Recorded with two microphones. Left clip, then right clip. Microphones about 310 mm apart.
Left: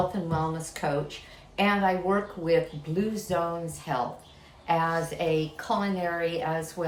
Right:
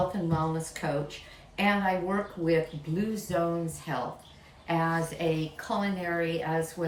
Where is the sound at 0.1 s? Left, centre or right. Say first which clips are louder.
Left 1 dB; centre.